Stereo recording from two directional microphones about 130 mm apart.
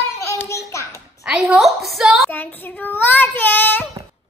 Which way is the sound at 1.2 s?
5° right (ahead or behind).